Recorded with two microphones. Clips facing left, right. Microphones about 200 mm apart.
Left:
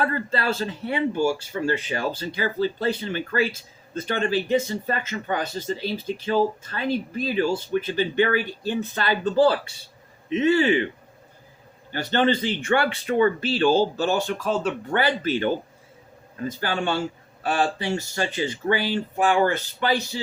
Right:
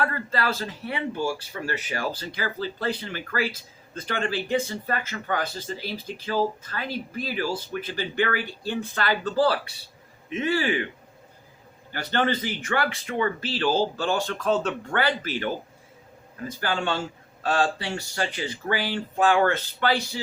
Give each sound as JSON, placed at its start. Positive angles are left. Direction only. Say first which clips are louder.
{"t": 0.0, "sound": "speech", "louder": "left 2 dB", "side_deg": 25}
{"t": 11.9, "sound": "speech", "louder": "left 4 dB", "side_deg": 25}
{"t": 14.9, "sound": "speech", "louder": "left 4 dB", "side_deg": 20}
{"t": 17.4, "sound": "speech", "louder": "left 1 dB", "side_deg": 15}